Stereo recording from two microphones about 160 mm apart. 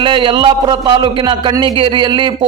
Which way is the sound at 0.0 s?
30° right (ahead or behind).